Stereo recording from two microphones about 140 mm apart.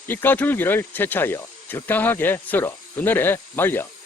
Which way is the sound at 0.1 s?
15° left (ahead or behind).